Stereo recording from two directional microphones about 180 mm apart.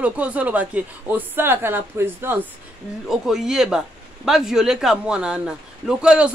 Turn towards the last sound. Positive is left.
turn(degrees=-5)  # may be behind; listen again after turning